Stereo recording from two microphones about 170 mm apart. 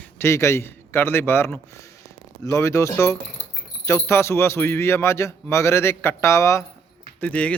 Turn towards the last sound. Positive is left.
turn(degrees=10)  # may be behind; listen again after turning